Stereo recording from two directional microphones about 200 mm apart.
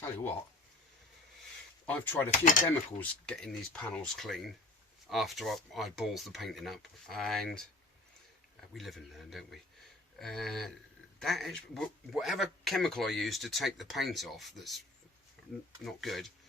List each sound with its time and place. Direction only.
1.9 s speech: 10° left (ahead or behind)
2.4 s speech: 40° left (ahead or behind)
2.6 s speech: 5° left (ahead or behind)
8.7 s speech: centre (ahead or behind)
15.8 s speech: centre (ahead or behind)